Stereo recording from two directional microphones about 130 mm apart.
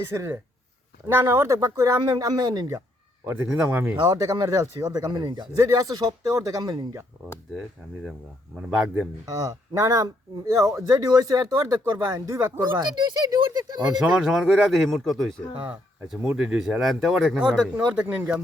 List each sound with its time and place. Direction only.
0.0 s speech: 20° right (ahead or behind)
3.2 s speech: 15° right (ahead or behind)
3.9 s speech: 35° right (ahead or behind)
9.2 s speech: 25° right (ahead or behind)
14.0 s speech: 5° right (ahead or behind)
15.6 s speech: 15° right (ahead or behind)